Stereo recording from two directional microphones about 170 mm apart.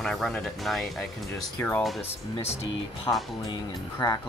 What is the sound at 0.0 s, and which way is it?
Speech, centre (ahead or behind).